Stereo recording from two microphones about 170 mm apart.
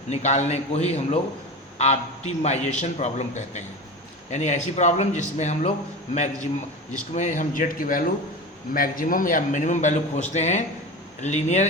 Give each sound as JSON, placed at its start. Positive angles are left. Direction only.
{"t": 0.1, "sound": "a man's voice", "side_deg": 40}
{"t": 6.9, "sound": "a man's voice", "side_deg": 45}